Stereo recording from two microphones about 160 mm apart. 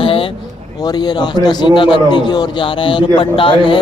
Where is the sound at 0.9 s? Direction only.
25° left (ahead or behind).